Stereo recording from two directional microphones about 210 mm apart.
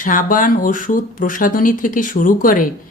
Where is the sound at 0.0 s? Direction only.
40° left (ahead or behind).